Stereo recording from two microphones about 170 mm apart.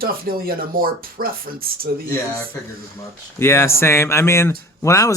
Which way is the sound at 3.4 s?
15° left (ahead or behind).